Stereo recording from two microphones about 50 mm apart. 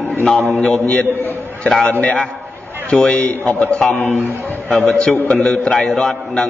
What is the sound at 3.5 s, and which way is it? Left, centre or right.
A man's voice, left.